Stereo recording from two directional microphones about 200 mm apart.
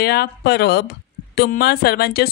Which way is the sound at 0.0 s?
50° left (ahead or behind).